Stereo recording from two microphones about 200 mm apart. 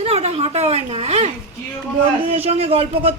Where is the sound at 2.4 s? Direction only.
30° right (ahead or behind).